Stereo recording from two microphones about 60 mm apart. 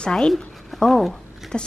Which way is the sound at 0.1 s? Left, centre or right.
Centre.